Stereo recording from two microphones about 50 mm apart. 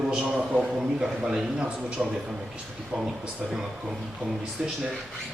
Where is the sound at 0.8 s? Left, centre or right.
Centre.